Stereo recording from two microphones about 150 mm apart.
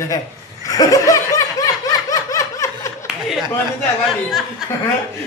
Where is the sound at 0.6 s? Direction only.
25° left (ahead or behind).